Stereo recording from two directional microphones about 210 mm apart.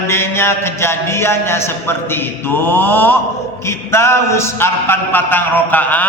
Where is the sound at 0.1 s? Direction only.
10° left (ahead or behind).